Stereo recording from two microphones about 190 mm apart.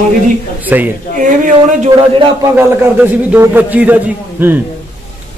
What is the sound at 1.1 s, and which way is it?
Speech, 45° right (ahead or behind).